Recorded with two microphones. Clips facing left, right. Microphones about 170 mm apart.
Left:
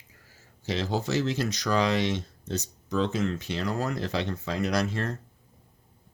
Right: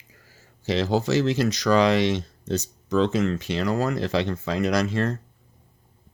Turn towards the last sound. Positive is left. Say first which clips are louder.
# right 5 dB
turn(degrees=-90)